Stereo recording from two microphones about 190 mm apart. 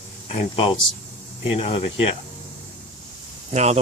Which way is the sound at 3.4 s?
35° right (ahead or behind).